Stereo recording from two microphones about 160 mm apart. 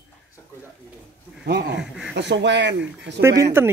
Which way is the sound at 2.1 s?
90° right.